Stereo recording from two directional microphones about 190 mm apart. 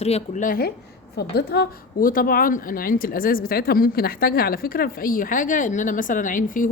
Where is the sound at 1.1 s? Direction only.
55° left (ahead or behind).